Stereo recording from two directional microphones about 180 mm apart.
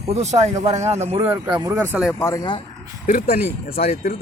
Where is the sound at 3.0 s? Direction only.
50° left (ahead or behind).